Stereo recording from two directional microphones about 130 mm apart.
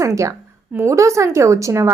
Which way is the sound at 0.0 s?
25° right (ahead or behind).